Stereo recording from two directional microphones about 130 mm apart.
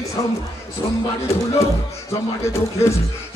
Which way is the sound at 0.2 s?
30° left (ahead or behind).